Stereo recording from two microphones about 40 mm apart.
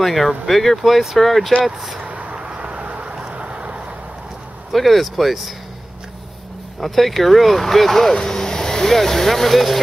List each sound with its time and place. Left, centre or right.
0.0 s speech: centre
2.0 s a sound: right
2.3 s vehicle: right
3.3 s boat: right
4.7 s speech: centre
6.8 s speech: centre